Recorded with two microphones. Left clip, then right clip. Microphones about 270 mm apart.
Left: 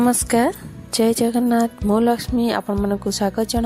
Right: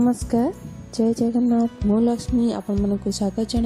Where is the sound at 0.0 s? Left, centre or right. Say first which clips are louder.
Left 4 dB; left.